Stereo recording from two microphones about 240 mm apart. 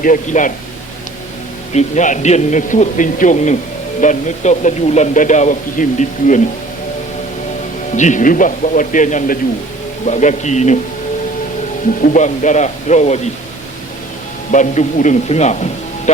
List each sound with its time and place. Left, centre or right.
0.0 s a man's voice: left
1.7 s a man's voice: left
7.9 s a man's voice: left
12.0 s a man's voice: left
14.5 s a man's voice: left